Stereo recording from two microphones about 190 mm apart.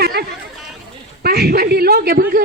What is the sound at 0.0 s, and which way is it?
Chatter, 55° right (ahead or behind).